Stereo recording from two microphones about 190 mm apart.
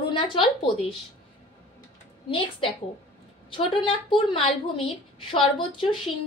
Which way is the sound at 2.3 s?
25° left (ahead or behind).